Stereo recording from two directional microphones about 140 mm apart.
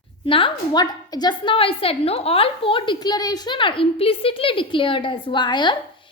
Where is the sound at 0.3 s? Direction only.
40° left (ahead or behind).